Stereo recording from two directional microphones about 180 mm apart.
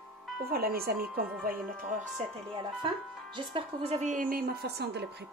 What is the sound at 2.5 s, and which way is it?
A woman's voice, 25° right (ahead or behind).